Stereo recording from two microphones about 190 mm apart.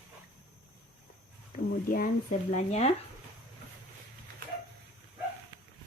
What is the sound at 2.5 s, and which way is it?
Speech, 40° left (ahead or behind).